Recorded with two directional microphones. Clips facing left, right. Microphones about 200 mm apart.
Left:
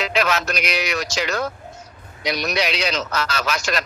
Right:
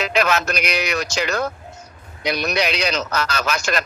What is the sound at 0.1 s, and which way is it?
A man's voice, 50° right (ahead or behind).